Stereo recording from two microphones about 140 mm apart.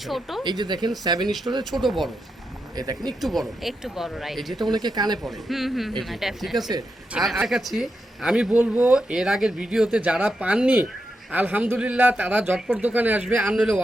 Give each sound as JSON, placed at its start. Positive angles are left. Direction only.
{"t": 0.1, "sound": "speech", "side_deg": 0}
{"t": 0.4, "sound": "speech", "side_deg": -30}
{"t": 1.7, "sound": "speech", "side_deg": 0}
{"t": 2.7, "sound": "speech", "side_deg": -25}
{"t": 3.2, "sound": "speech", "side_deg": 0}
{"t": 4.7, "sound": "speech", "side_deg": -30}
{"t": 5.2, "sound": "a man's voice", "side_deg": 0}